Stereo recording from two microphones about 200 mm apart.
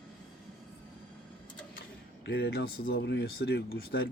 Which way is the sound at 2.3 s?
55° left (ahead or behind).